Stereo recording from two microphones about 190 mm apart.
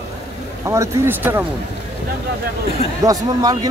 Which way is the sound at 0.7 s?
15° right (ahead or behind).